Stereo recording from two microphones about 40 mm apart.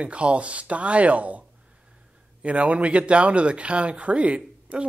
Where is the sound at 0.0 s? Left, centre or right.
Right.